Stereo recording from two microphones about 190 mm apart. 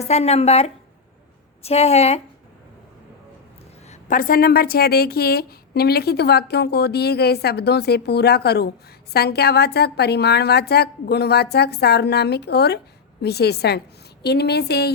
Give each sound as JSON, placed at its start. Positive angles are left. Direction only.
{"t": 0.0, "sound": "a woman's voice", "side_deg": 35}
{"t": 3.8, "sound": "a woman's voice", "side_deg": 45}